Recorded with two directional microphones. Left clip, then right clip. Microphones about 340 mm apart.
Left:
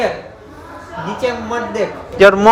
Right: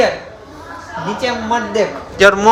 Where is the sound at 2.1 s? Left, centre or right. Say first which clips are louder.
Left 2 dB; centre.